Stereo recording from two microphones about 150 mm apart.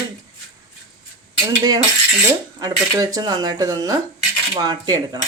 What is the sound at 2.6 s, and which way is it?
Speech, 25° right (ahead or behind).